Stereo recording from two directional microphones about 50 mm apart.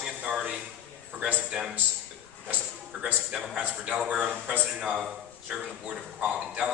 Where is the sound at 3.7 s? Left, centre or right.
Right.